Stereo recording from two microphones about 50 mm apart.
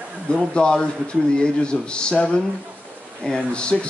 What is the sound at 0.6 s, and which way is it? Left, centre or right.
Speech, centre.